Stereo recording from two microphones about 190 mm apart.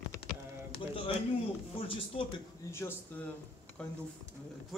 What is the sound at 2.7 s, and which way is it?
Speech, 15° left (ahead or behind).